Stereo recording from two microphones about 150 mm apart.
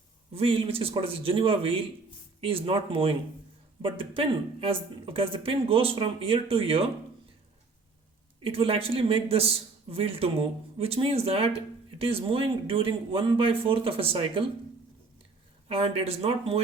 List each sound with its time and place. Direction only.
0.3 s a man's voice: 35° right (ahead or behind)
8.4 s a man's voice: 35° right (ahead or behind)
15.7 s a man's voice: 40° right (ahead or behind)